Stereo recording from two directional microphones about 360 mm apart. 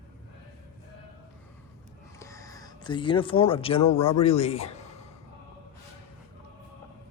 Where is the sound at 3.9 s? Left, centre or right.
Centre.